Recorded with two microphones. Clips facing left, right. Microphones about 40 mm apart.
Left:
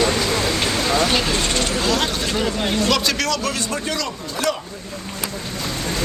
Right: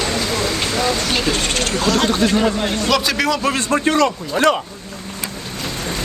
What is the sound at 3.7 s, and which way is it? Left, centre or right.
Speech, right.